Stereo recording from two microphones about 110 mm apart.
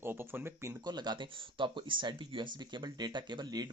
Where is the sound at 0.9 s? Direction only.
40° right (ahead or behind).